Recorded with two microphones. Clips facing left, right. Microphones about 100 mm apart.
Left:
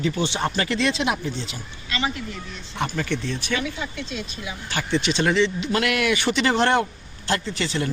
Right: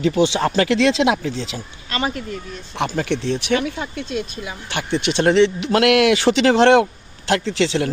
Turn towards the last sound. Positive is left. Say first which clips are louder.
# right 7 dB
turn(degrees=-90)